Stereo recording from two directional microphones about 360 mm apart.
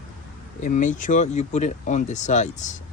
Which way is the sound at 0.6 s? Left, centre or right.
Left.